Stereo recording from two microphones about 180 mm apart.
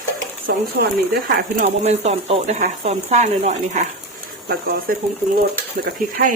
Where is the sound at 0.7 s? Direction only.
65° right (ahead or behind).